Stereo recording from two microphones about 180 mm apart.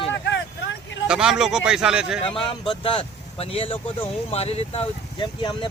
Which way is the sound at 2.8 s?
30° left (ahead or behind).